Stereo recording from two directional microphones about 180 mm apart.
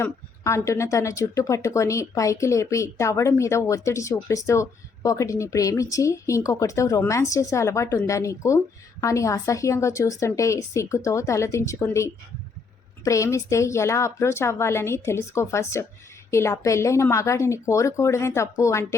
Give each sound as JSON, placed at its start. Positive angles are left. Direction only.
{"t": 0.0, "sound": "speech", "side_deg": 15}